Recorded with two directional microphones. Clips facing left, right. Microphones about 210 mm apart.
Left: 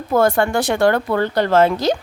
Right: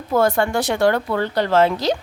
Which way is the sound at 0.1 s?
50° left (ahead or behind).